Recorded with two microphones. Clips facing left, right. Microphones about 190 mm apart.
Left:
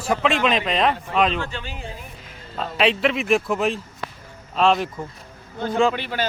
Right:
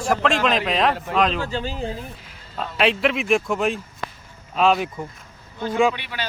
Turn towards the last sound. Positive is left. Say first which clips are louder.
# left 6 dB
turn(degrees=45)  # may be behind; listen again after turning